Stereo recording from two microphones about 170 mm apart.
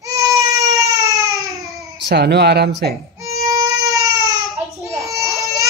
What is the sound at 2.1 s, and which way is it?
Speech, 75° right (ahead or behind).